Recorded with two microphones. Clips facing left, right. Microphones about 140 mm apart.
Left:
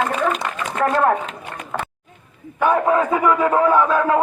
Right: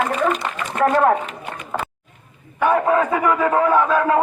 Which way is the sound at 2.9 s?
15° left (ahead or behind).